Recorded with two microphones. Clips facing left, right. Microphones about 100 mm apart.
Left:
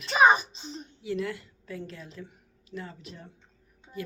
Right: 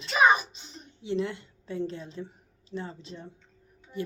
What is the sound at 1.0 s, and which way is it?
A woman's voice, 25° right (ahead or behind).